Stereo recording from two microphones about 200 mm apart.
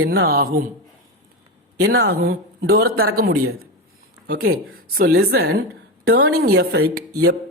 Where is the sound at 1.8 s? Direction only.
50° right (ahead or behind).